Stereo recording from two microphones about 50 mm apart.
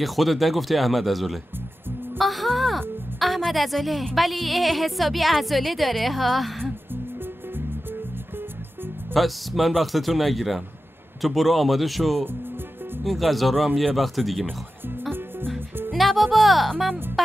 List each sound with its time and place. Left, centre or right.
0.0 s a woman's voice: centre
2.1 s music: centre
3.2 s a sound: centre
4.1 s a woman's voice: centre
9.1 s a woman's voice: centre
15.9 s speech: centre